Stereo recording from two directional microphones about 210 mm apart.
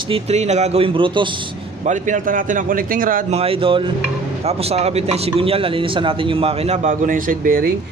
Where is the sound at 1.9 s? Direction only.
35° right (ahead or behind).